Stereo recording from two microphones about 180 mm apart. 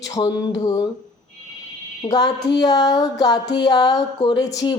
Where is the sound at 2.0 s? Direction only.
20° left (ahead or behind).